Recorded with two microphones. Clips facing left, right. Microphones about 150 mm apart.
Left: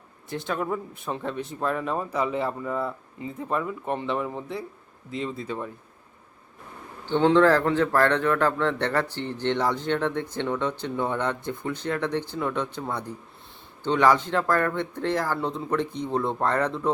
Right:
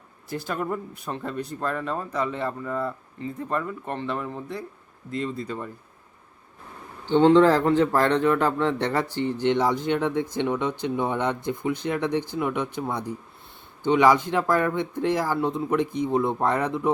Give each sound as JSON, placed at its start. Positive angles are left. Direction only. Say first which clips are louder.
{"t": 0.3, "sound": "speech", "louder": "even", "side_deg": 0}
{"t": 7.0, "sound": "speech", "louder": "right 3 dB", "side_deg": -15}
{"t": 13.8, "sound": "speech", "louder": "right 2 dB", "side_deg": -15}